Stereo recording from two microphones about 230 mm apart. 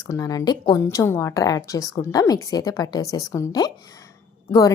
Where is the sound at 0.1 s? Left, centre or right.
Centre.